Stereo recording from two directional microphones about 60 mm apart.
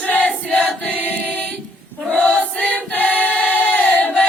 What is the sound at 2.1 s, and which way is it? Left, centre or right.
Choir, centre.